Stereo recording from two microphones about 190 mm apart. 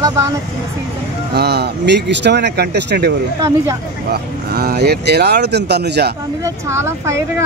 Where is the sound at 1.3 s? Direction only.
60° right (ahead or behind).